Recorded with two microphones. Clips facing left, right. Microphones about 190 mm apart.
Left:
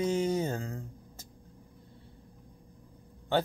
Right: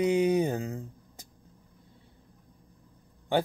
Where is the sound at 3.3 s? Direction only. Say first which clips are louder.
Right 2 dB; 15° right (ahead or behind).